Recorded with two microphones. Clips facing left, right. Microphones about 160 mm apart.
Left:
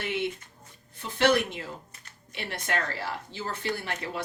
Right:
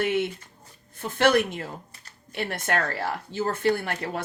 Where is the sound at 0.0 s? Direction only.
55° right (ahead or behind).